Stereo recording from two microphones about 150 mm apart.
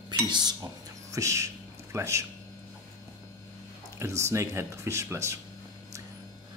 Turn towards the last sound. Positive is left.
turn(degrees=-20)  # may be behind; listen again after turning